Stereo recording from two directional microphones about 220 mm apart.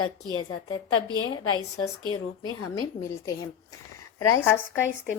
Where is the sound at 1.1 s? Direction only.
70° left (ahead or behind).